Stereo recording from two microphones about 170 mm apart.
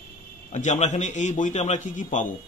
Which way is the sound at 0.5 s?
40° left (ahead or behind).